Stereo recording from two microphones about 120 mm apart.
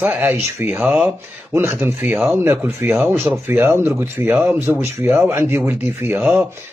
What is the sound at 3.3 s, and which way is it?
Speech, 15° right (ahead or behind).